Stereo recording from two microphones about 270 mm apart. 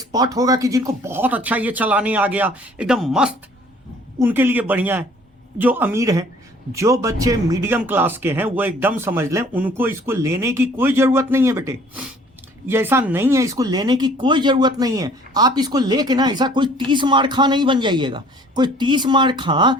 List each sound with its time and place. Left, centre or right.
0.0 s speech: centre